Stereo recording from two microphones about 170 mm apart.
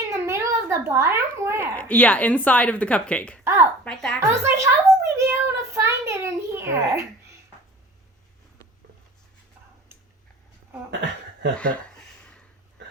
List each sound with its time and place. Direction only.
0.1 s a sound: 15° right (ahead or behind)
1.7 s speech: 10° left (ahead or behind)
3.4 s a woman's voice: 15° right (ahead or behind)
11.5 s speech: 5° left (ahead or behind)